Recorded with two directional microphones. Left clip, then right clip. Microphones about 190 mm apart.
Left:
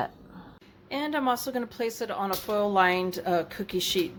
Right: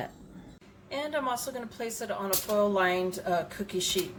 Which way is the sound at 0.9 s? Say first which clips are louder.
Left 3 dB; 50° left (ahead or behind).